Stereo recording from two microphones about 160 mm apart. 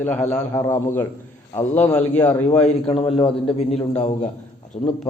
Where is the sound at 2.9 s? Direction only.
40° left (ahead or behind).